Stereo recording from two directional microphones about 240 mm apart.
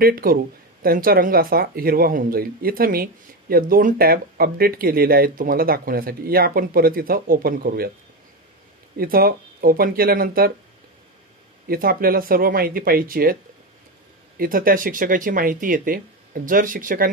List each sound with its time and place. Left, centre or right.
0.0 s speech: right
8.9 s speech: right
11.6 s speech: right